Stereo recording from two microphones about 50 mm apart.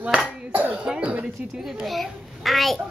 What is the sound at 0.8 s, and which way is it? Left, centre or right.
Cough, right.